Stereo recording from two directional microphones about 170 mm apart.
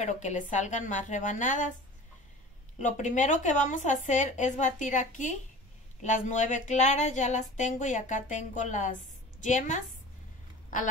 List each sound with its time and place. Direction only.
0.0 s a woman's voice: 45° left (ahead or behind)
2.8 s a woman's voice: 45° left (ahead or behind)